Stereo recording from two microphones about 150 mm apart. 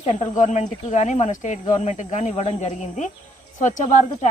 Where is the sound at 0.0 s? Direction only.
50° left (ahead or behind).